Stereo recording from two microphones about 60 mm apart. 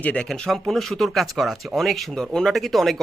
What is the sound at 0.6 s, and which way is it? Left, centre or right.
Speech, centre.